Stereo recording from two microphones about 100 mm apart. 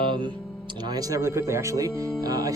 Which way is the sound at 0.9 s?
35° right (ahead or behind).